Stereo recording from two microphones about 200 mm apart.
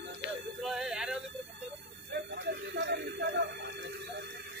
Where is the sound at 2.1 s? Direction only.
55° right (ahead or behind).